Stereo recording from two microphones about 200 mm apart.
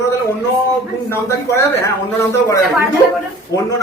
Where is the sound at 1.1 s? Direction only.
15° left (ahead or behind).